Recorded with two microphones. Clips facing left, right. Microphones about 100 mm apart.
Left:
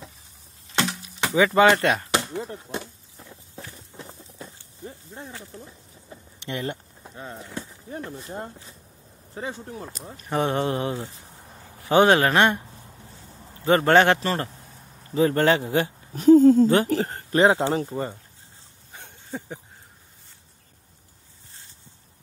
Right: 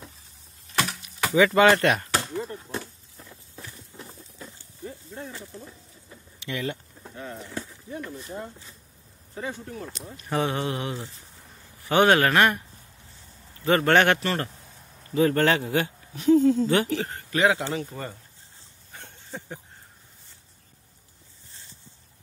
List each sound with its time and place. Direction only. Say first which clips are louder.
0.7 s chop: left 1 dB; 25° left (ahead or behind)
3.5 s a sound: left 2 dB; 25° left (ahead or behind)
6.5 s speech: left 1 dB; 50° left (ahead or behind)
7.2 s speech: even; 25° left (ahead or behind)
7.9 s a man's voice: left 1 dB; 35° left (ahead or behind)
10.3 s a man's voice: left 2 dB; 20° left (ahead or behind)
10.6 s a man's voice: left 4 dB; 35° left (ahead or behind)
16.2 s speech: left 6 dB; 45° left (ahead or behind); by 18.1 s 25° left (ahead or behind)
18.9 s a sound: left 4 dB; 10° left (ahead or behind)